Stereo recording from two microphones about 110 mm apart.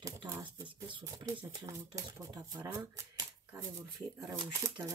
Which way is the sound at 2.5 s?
30° right (ahead or behind).